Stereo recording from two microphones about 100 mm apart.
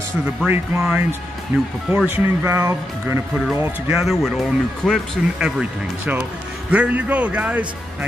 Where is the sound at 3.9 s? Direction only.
Centre (ahead or behind).